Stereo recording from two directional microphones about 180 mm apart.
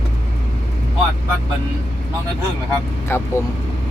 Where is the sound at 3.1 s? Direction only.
15° left (ahead or behind).